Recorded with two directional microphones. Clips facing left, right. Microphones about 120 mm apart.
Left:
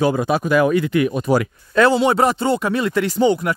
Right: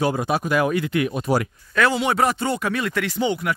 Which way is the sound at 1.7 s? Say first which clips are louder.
Left 5 dB; 30° left (ahead or behind).